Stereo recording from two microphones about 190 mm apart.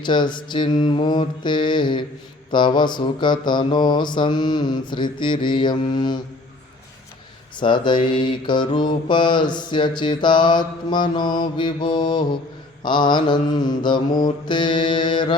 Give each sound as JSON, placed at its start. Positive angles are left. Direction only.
{"t": 0.0, "sound": "mantra", "side_deg": 25}
{"t": 7.6, "sound": "mantra", "side_deg": 25}